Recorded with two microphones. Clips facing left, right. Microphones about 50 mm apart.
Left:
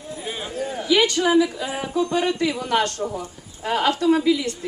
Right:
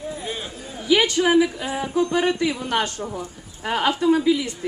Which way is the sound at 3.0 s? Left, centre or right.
Right.